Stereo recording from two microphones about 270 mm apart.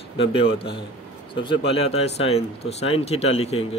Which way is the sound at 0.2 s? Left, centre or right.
Centre.